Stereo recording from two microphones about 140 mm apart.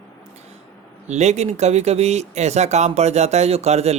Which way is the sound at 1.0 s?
55° right (ahead or behind).